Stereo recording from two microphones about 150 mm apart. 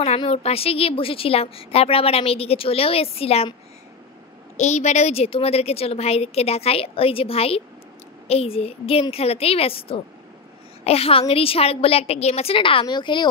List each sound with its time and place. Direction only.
0.0 s a woman's voice: 45° left (ahead or behind)
4.6 s a woman's voice: 50° left (ahead or behind); by 13.3 s 30° left (ahead or behind)